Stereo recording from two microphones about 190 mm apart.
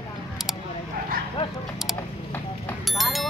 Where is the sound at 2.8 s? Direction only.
Centre (ahead or behind).